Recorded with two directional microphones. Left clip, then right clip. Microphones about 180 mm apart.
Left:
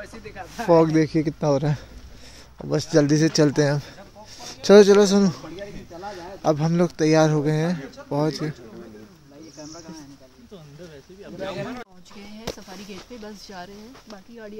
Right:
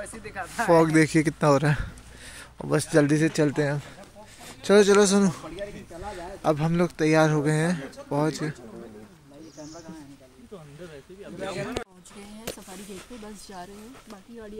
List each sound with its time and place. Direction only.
0.2 s speech: 30° right (ahead or behind)
0.7 s speech: 10° left (ahead or behind)
0.9 s a man's voice: 5° right (ahead or behind)
2.9 s speech: 10° left (ahead or behind)
11.3 s speech: 60° left (ahead or behind)
12.4 s a sound: 20° left (ahead or behind)
13.2 s a man's voice: 5° left (ahead or behind)